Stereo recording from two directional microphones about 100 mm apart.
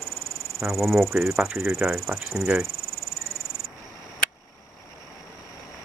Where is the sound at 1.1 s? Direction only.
30° right (ahead or behind).